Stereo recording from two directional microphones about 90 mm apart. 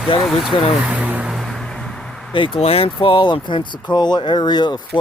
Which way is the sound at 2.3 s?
70° left (ahead or behind).